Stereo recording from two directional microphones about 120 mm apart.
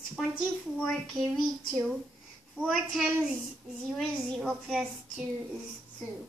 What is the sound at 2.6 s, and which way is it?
Speech, 15° left (ahead or behind).